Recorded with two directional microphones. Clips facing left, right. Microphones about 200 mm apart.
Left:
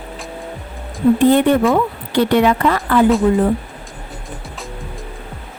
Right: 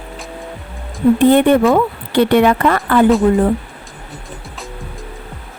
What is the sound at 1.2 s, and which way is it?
Speech, 60° right (ahead or behind).